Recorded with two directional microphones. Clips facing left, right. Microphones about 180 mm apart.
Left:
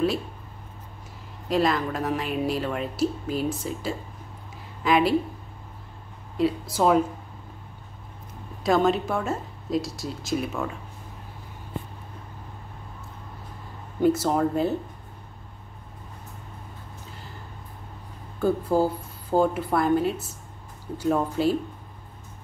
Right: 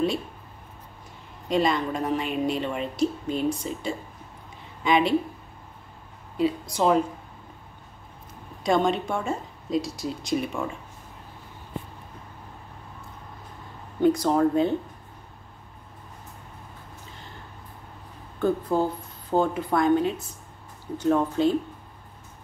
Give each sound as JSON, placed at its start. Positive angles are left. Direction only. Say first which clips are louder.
{"t": 1.5, "sound": "speech", "louder": "even", "side_deg": 0}
{"t": 6.3, "sound": "speech", "louder": "left 1 dB", "side_deg": 0}
{"t": 8.6, "sound": "speech", "louder": "left 1 dB", "side_deg": 0}
{"t": 14.0, "sound": "speech", "louder": "right 1 dB", "side_deg": 5}
{"t": 18.4, "sound": "speech", "louder": "left 1 dB", "side_deg": 10}